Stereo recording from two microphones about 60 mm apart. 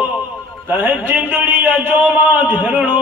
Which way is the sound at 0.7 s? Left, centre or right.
Right.